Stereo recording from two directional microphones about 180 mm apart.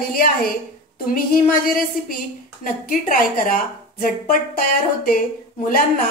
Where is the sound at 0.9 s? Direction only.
50° left (ahead or behind).